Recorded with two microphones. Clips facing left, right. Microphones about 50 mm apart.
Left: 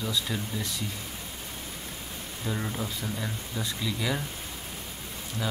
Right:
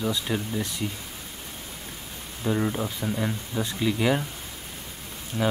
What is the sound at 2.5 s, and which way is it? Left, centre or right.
Speech, centre.